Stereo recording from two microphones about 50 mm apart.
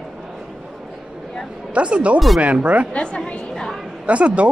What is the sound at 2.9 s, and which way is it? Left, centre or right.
Speech, left.